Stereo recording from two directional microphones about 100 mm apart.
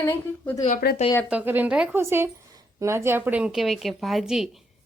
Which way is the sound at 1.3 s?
20° right (ahead or behind).